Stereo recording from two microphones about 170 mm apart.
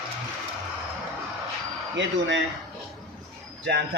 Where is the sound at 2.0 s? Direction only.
90° right.